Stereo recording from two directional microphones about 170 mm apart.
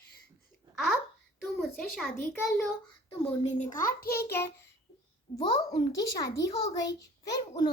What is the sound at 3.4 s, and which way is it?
Speech, 50° left (ahead or behind).